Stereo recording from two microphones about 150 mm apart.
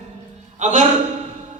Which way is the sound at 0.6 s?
55° right (ahead or behind).